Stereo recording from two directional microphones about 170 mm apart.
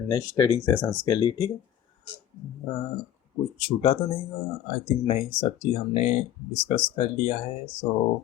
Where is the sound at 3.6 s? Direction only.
35° left (ahead or behind).